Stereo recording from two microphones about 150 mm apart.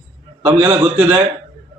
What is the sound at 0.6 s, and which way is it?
Speech, 15° right (ahead or behind).